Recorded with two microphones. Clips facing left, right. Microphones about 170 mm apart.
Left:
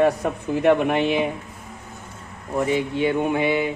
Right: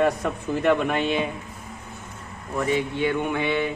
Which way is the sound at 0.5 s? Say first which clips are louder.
Left 4 dB; 10° left (ahead or behind).